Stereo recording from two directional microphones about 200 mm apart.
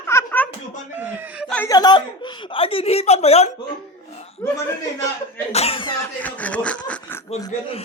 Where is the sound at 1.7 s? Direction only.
20° left (ahead or behind).